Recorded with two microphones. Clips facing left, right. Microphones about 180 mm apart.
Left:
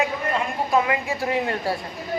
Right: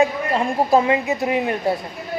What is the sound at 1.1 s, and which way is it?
Speech, 20° right (ahead or behind).